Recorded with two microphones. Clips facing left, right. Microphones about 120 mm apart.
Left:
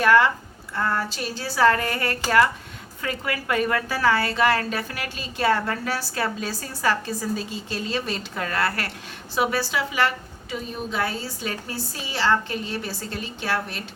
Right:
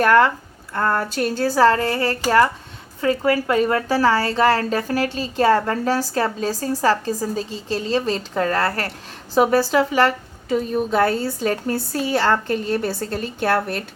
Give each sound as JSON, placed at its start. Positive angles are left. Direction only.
{"t": 0.0, "sound": "a woman's voice", "side_deg": -45}
{"t": 1.6, "sound": "a woman's voice", "side_deg": -30}